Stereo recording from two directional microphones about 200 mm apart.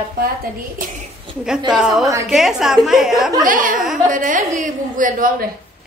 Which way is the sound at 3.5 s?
45° right (ahead or behind).